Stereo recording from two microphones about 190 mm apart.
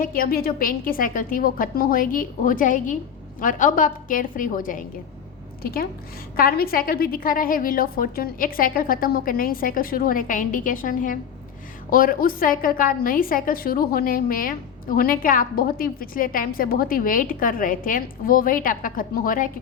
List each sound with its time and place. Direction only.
0.0 s a woman's voice: 50° left (ahead or behind)